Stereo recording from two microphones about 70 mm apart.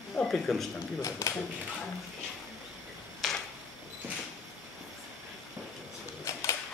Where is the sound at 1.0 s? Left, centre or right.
Left.